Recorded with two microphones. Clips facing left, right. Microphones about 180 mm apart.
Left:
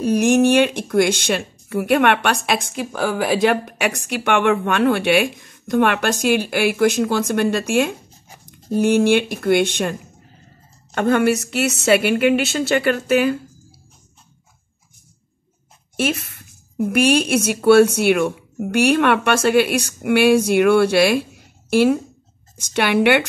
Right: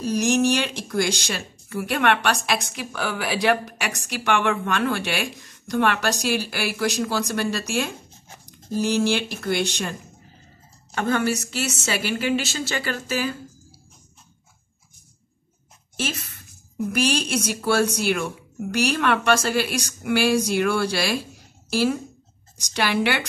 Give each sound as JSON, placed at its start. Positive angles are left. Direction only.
{"t": 0.0, "sound": "speech", "side_deg": 60}
{"t": 11.0, "sound": "speech", "side_deg": 60}
{"t": 16.0, "sound": "speech", "side_deg": 60}